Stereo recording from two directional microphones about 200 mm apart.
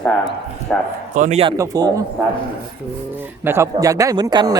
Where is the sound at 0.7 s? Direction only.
5° left (ahead or behind).